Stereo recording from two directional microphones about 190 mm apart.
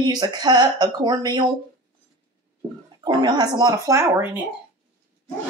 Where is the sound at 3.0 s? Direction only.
20° right (ahead or behind).